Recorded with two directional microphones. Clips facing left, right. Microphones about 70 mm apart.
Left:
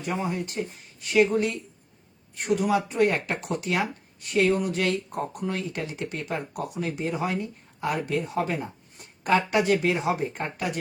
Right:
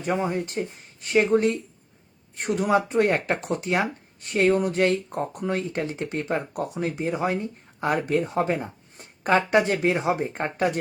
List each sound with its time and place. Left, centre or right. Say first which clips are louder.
0.0 s speech: right 4 dB; right